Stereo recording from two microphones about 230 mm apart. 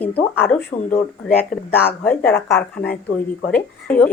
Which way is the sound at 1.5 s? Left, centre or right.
Centre.